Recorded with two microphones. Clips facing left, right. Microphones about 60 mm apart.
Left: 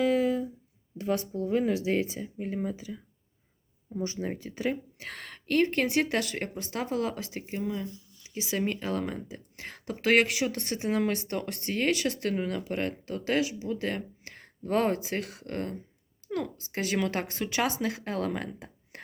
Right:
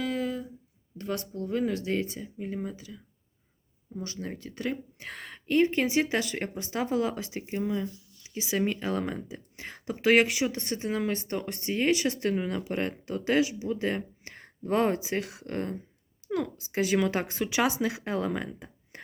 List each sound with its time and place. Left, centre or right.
0.0 s a sound: centre
0.9 s a woman's voice: centre
4.0 s a woman's voice: centre
7.1 s a woman's voice: centre
8.4 s speech: centre
12.8 s speech: centre
15.4 s speech: right
16.7 s speech: centre